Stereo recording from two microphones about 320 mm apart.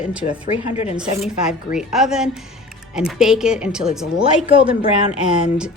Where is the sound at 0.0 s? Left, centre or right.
Centre.